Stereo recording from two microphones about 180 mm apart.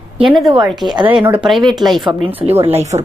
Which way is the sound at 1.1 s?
25° right (ahead or behind).